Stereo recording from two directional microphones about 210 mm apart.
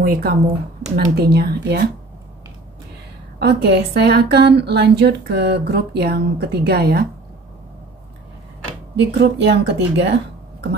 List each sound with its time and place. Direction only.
0.0 s a woman's voice: 45° right (ahead or behind)
3.3 s a woman's voice: 50° right (ahead or behind)
8.9 s speech: 55° right (ahead or behind)